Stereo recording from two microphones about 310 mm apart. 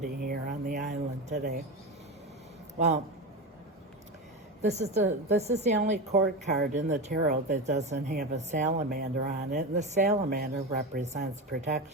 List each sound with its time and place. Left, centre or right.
0.3 s a sound: right
2.7 s a man's voice: right
4.6 s speech: right